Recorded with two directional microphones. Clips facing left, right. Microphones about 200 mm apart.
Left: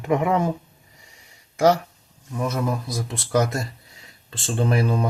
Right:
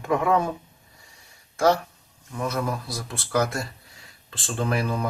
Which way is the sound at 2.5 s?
20° left (ahead or behind).